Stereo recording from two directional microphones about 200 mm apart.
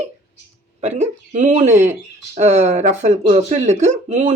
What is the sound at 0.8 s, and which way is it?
Speech, 35° right (ahead or behind).